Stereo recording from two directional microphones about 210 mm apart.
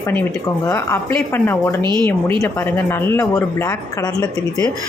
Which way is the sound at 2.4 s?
10° left (ahead or behind).